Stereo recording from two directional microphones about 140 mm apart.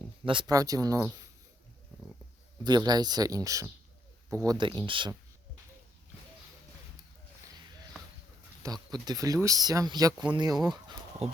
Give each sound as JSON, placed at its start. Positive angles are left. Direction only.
{"t": 0.3, "sound": "speech", "side_deg": -30}
{"t": 2.6, "sound": "speech", "side_deg": -30}
{"t": 4.4, "sound": "speech", "side_deg": -35}
{"t": 8.6, "sound": "speech", "side_deg": -30}
{"t": 11.2, "sound": "speech", "side_deg": -45}